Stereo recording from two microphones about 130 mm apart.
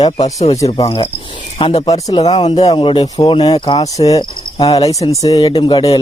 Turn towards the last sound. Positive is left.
turn(degrees=40)  # may be behind; listen again after turning